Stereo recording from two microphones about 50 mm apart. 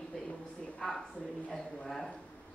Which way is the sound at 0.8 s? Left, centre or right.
Centre.